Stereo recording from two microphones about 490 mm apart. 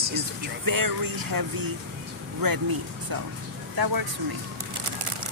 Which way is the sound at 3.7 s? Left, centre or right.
Right.